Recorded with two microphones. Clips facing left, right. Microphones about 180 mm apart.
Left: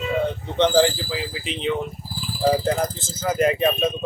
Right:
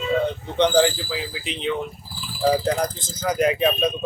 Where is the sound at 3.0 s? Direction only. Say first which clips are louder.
Left 1 dB; 25° left (ahead or behind).